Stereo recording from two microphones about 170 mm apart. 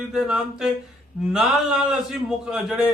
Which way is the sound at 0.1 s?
5° right (ahead or behind).